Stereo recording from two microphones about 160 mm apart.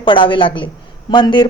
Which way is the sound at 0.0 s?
30° left (ahead or behind).